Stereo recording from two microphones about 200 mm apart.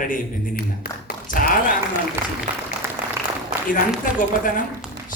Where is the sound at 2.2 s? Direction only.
10° right (ahead or behind).